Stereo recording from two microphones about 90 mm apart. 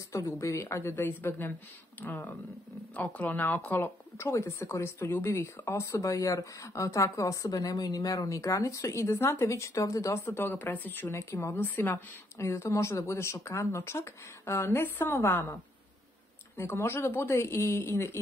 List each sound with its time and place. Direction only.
0.1 s a woman's voice: 35° left (ahead or behind)
11.5 s speech: 25° left (ahead or behind)
16.5 s a woman's voice: 30° left (ahead or behind)